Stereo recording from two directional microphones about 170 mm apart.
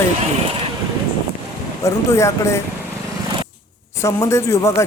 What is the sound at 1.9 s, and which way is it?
Speech, 15° left (ahead or behind).